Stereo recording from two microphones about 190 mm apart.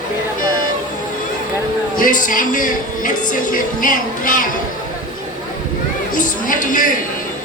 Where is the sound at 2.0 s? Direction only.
45° left (ahead or behind).